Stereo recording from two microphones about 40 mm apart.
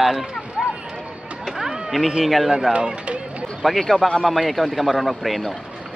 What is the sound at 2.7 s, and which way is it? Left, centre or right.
Speech, right.